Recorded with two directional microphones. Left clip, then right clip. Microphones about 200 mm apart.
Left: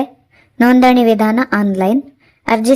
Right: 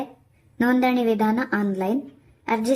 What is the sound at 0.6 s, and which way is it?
A woman's voice, 40° left (ahead or behind).